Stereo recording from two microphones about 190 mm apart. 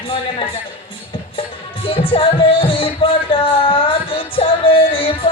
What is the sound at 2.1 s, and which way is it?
Music, 30° left (ahead or behind).